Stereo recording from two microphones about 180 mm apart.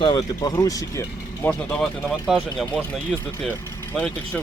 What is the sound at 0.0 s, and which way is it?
Speech, 25° left (ahead or behind).